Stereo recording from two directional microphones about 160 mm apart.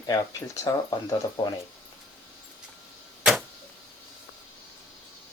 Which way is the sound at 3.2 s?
5° right (ahead or behind).